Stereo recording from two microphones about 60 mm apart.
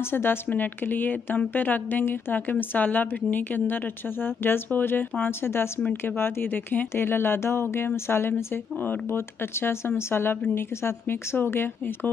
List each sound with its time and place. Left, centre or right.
0.1 s a woman's voice: left
2.0 s speech: left
2.7 s speech: left